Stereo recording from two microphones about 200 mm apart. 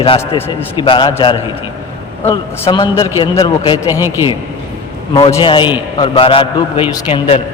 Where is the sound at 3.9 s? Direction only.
10° right (ahead or behind).